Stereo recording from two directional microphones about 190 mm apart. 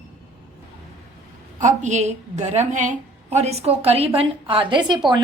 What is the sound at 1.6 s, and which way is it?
A woman's voice, 40° right (ahead or behind).